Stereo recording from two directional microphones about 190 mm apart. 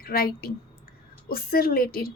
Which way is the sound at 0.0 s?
50° left (ahead or behind).